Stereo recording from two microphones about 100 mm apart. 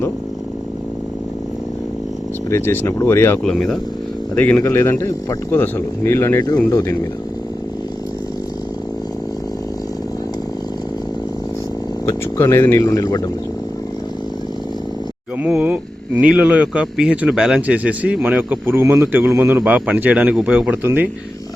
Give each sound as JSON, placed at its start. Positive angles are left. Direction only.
{"t": 2.5, "sound": "speech", "side_deg": 25}
{"t": 3.4, "sound": "speech", "side_deg": 5}
{"t": 4.6, "sound": "speech", "side_deg": 25}
{"t": 6.7, "sound": "speech", "side_deg": 40}
{"t": 12.0, "sound": "speech", "side_deg": 30}
{"t": 12.9, "sound": "speech", "side_deg": 40}
{"t": 15.4, "sound": "speech", "side_deg": -15}